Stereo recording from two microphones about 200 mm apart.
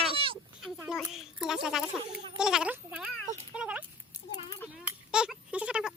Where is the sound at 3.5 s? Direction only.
5° right (ahead or behind).